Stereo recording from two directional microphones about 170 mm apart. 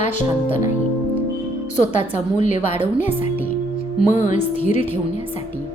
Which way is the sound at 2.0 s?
45° left (ahead or behind).